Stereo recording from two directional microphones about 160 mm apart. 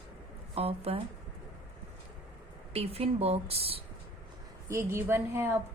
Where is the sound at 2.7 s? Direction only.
40° right (ahead or behind).